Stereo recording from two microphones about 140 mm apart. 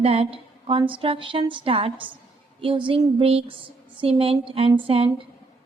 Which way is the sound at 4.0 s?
45° right (ahead or behind).